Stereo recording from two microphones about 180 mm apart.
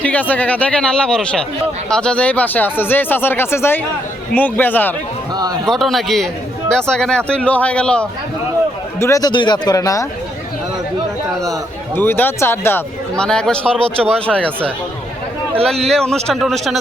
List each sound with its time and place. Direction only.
0.0 s a man's voice: 10° left (ahead or behind)
5.3 s a man's voice: 20° right (ahead or behind)
5.6 s a man's voice: centre (ahead or behind)
9.0 s speech: 15° left (ahead or behind)
11.9 s a man's voice: 10° left (ahead or behind)
15.6 s a man's voice: centre (ahead or behind)